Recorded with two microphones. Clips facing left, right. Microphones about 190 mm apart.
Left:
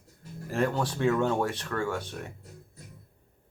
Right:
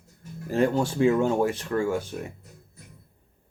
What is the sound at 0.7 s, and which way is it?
Speech, 20° right (ahead or behind).